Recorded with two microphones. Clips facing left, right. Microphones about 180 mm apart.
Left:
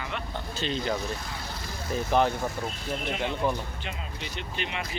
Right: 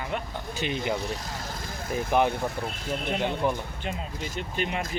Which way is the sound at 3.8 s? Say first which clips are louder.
Right 4 dB; 45° right (ahead or behind).